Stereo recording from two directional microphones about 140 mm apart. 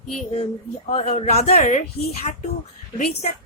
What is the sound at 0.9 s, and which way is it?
Speech, 50° left (ahead or behind).